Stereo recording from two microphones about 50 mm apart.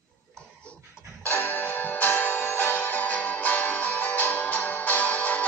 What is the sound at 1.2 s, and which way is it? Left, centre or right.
Music, left.